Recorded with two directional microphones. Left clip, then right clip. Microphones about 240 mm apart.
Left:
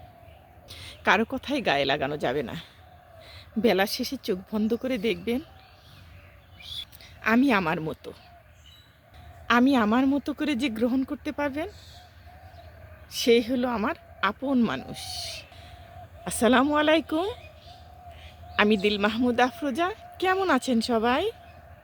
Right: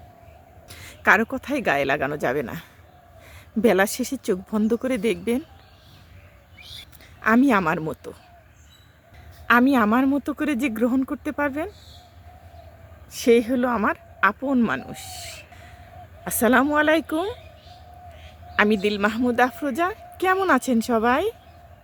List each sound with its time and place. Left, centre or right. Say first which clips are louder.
0.7 s speech: right 5 dB; centre
7.2 s speech: right 4 dB; centre
9.5 s speech: right 4 dB; centre
13.2 s speech: right 4 dB; centre
16.2 s a woman's voice: right 3 dB; centre
18.5 s a woman's voice: right 2 dB; centre